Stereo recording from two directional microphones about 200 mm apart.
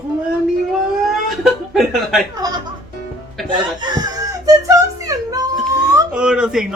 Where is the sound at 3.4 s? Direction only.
25° right (ahead or behind).